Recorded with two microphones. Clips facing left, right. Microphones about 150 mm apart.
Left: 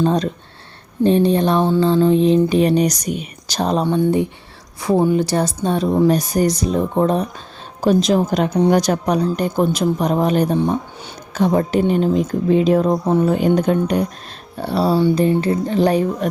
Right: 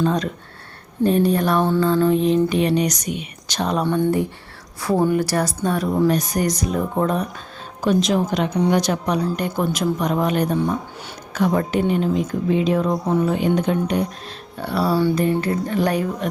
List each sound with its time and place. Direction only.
0.0 s a sound: 30° left (ahead or behind)
3.8 s a woman's voice: 15° left (ahead or behind); by 8.2 s 35° left (ahead or behind)
8.7 s a sound: 40° left (ahead or behind)
12.9 s speech: 30° left (ahead or behind)
13.2 s speech: 45° left (ahead or behind)
14.6 s speech: 30° left (ahead or behind)